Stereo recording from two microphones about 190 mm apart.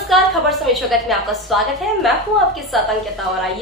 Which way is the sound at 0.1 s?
Centre (ahead or behind).